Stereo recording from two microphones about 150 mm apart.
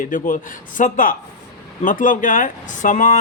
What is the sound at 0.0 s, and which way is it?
A man's voice, 65° left (ahead or behind).